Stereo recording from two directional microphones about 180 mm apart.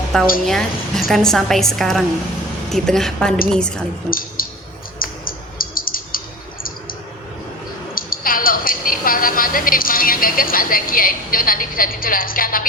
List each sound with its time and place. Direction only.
0.4 s a woman's voice: centre (ahead or behind)
4.4 s a sound: 50° left (ahead or behind)
4.9 s bird: 50° left (ahead or behind)
7.9 s a woman's voice: 50° left (ahead or behind)